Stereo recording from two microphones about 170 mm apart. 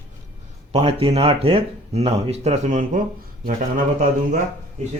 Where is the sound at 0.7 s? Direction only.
35° right (ahead or behind).